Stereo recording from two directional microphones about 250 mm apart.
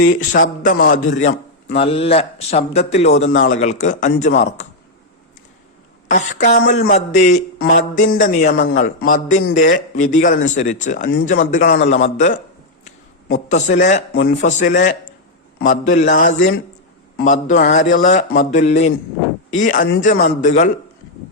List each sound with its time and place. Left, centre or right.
0.1 s a man's voice: left
6.1 s a man's voice: left
13.5 s a man's voice: left